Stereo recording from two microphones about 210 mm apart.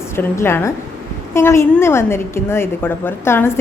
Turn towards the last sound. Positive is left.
turn(degrees=10)  # may be behind; listen again after turning